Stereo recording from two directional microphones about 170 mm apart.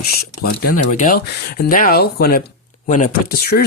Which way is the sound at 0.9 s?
55° left (ahead or behind).